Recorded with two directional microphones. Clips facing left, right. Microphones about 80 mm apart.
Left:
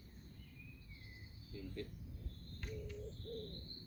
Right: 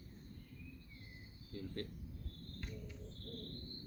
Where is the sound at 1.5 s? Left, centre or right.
Right.